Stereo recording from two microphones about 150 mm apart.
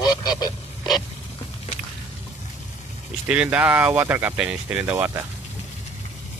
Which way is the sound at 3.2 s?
10° right (ahead or behind).